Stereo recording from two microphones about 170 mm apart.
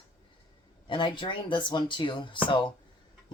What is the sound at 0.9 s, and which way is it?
Speech, 30° left (ahead or behind).